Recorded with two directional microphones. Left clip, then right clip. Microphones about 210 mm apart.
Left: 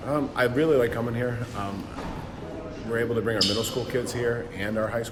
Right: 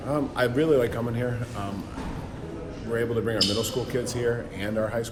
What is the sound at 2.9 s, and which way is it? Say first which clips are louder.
Speech: left 1 dB; 5° left (ahead or behind).